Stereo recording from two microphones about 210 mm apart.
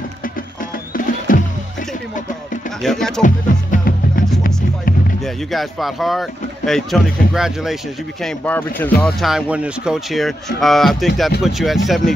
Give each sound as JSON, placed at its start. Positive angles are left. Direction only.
{"t": 0.9, "sound": "music", "side_deg": 40}
{"t": 2.8, "sound": "speech", "side_deg": 0}
{"t": 3.2, "sound": "music", "side_deg": 40}
{"t": 5.2, "sound": "speech", "side_deg": 0}